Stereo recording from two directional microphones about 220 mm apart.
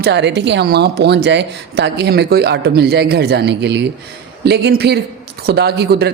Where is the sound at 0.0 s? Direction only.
50° right (ahead or behind).